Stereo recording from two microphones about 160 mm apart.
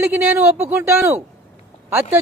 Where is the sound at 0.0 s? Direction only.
10° right (ahead or behind).